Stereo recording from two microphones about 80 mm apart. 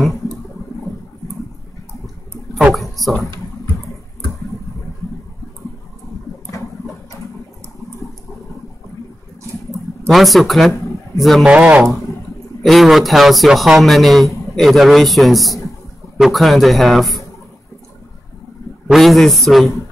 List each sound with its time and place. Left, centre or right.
2.7 s a sound: centre
9.7 s a sound: centre
11.1 s speech: centre
11.4 s speech: centre
12.6 s speech: centre
18.9 s speech: centre